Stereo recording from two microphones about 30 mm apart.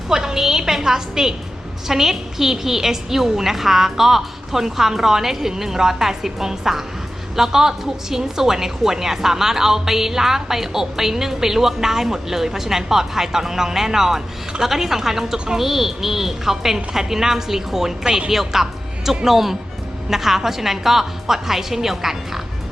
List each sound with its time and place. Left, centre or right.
0.1 s a woman's voice: centre